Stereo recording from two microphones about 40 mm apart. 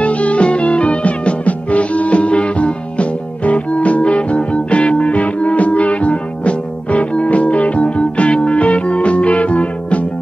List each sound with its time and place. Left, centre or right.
0.0 s music: left